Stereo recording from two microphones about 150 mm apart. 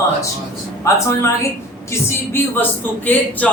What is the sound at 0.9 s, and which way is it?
Speech, 20° left (ahead or behind).